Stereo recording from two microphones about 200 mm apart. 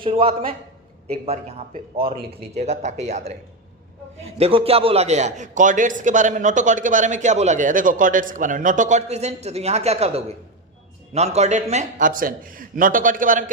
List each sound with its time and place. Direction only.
0.0 s a man's voice: 25° right (ahead or behind)